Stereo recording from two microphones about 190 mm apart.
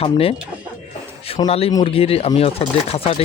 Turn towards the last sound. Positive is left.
turn(degrees=30)  # may be behind; listen again after turning